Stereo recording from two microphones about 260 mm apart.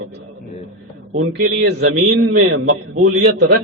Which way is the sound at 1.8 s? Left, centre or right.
Right.